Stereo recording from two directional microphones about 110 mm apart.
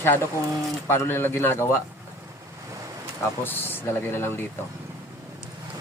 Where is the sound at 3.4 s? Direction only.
20° left (ahead or behind).